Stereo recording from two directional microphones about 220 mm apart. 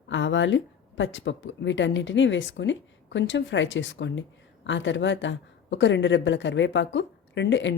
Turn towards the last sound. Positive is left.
turn(degrees=55)  # may be behind; listen again after turning